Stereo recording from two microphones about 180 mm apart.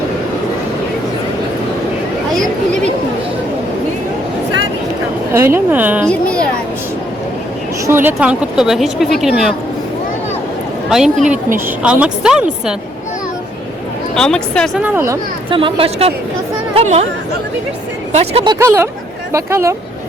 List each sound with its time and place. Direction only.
5.3 s a woman's voice: 15° right (ahead or behind)
6.1 s a woman's voice: 5° left (ahead or behind)
7.9 s speech: 10° right (ahead or behind)
10.8 s speech: 5° right (ahead or behind)
14.2 s speech: 5° left (ahead or behind)
14.8 s a woman's voice: 10° right (ahead or behind)
15.4 s speech: 30° right (ahead or behind)
18.1 s speech: 35° right (ahead or behind)
18.6 s a woman's voice: 15° right (ahead or behind)